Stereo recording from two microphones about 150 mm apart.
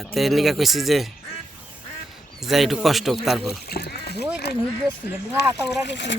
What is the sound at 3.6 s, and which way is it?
Speech, 90° left.